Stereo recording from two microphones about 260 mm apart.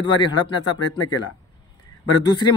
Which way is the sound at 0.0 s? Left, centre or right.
Centre.